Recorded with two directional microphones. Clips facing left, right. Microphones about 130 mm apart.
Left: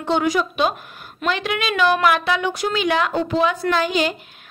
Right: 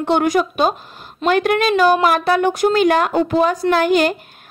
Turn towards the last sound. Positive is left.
turn(degrees=-55)  # may be behind; listen again after turning